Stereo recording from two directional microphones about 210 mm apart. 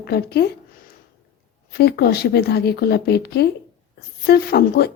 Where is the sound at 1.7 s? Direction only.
50° left (ahead or behind).